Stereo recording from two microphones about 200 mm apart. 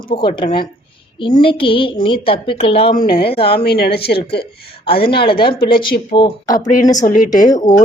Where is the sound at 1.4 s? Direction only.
25° left (ahead or behind).